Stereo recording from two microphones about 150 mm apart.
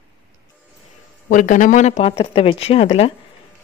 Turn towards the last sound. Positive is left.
turn(degrees=45)  # may be behind; listen again after turning